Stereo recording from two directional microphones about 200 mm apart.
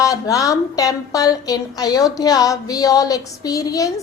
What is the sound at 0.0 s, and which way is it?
A woman's voice, 15° left (ahead or behind).